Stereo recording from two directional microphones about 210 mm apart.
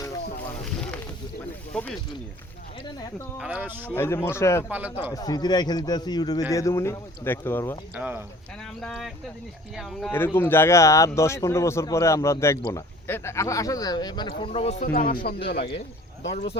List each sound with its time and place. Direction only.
0.6 s boat: 5° left (ahead or behind)
1.7 s speech: 5° left (ahead or behind)
3.3 s speech: 5° right (ahead or behind)
3.9 s speech: 10° left (ahead or behind)
4.7 s speech: 5° right (ahead or behind)
5.1 s speech: 20° left (ahead or behind)
7.9 s speech: 5° right (ahead or behind)
10.1 s speech: 10° left (ahead or behind); by 14.8 s 30° left (ahead or behind)
14.9 s speech: 40° left (ahead or behind)